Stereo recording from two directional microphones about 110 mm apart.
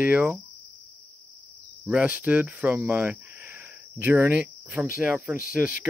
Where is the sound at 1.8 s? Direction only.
15° right (ahead or behind).